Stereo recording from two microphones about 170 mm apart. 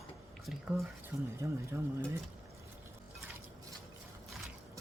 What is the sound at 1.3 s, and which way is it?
Speech, 15° right (ahead or behind).